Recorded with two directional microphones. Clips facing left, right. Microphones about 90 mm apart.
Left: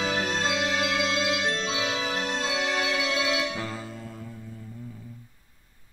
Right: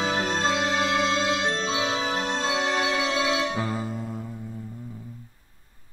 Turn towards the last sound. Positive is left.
turn(degrees=-20)  # may be behind; listen again after turning